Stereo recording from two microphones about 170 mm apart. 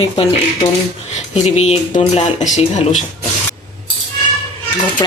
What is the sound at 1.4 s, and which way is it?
Speech, 40° left (ahead or behind).